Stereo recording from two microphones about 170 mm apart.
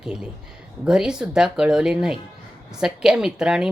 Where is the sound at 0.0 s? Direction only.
5° right (ahead or behind).